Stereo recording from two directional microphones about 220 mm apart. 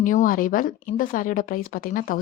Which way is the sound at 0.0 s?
35° left (ahead or behind).